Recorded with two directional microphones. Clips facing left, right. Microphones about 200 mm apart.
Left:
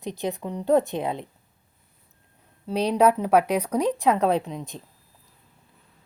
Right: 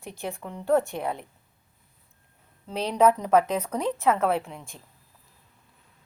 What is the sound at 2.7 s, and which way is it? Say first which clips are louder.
Speech: left 2 dB; 10° left (ahead or behind).